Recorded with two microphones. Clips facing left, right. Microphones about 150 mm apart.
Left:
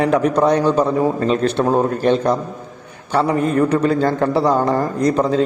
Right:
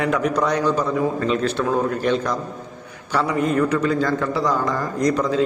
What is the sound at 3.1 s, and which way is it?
A man's voice, 35° left (ahead or behind).